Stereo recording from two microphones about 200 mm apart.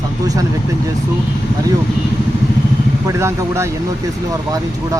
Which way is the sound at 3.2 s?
15° right (ahead or behind).